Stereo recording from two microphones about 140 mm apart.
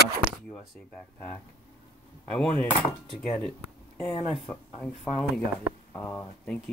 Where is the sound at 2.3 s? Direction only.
5° left (ahead or behind).